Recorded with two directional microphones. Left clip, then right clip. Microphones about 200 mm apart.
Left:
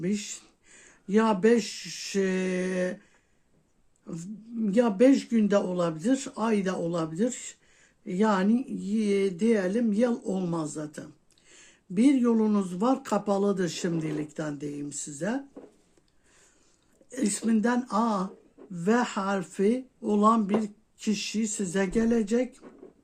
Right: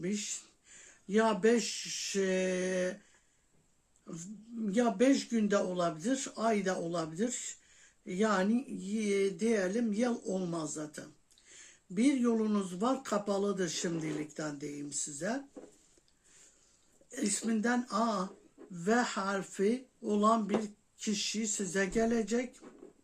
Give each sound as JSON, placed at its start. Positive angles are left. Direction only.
{"t": 0.0, "sound": "speech", "side_deg": 45}
{"t": 4.0, "sound": "speech", "side_deg": 45}
{"t": 17.1, "sound": "speech", "side_deg": 45}